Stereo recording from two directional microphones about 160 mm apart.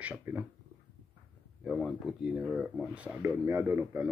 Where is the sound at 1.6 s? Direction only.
Centre (ahead or behind).